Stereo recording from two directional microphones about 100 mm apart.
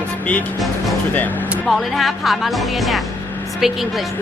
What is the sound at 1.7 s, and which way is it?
Speech, centre (ahead or behind).